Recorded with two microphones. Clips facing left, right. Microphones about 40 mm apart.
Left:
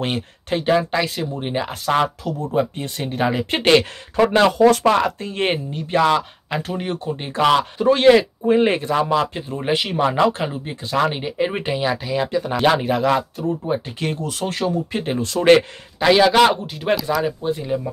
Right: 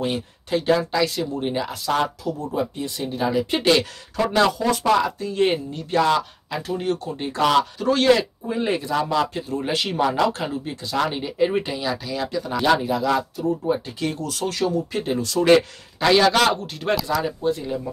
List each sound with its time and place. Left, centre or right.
0.0 s speech: left
0.6 s speech: left
4.2 s speech: left
4.6 s speech: left
4.8 s speech: left
8.5 s speech: left
8.9 s speech: left
16.0 s a man's voice: centre